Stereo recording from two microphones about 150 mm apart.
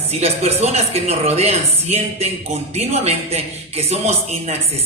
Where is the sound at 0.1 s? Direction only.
45° right (ahead or behind).